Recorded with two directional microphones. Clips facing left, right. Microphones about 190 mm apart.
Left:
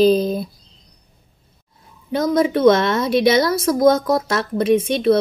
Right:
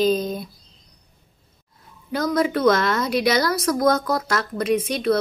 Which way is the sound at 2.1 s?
25° left (ahead or behind).